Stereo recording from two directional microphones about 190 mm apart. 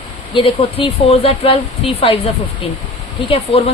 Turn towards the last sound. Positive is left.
turn(degrees=30)  # may be behind; listen again after turning